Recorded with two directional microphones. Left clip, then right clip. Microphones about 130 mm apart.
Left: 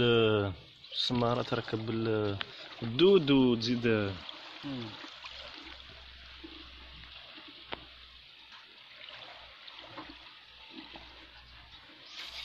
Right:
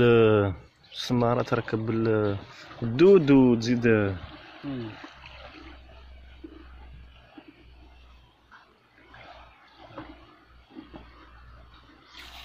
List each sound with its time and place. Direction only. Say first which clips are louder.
0.0 s a sound: right 7 dB; 10° right (ahead or behind)
1.1 s speech: right 9 dB; centre (ahead or behind)
3.5 s speech: right 7 dB; 5° right (ahead or behind)